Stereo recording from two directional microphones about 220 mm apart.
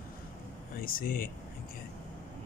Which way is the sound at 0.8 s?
40° left (ahead or behind).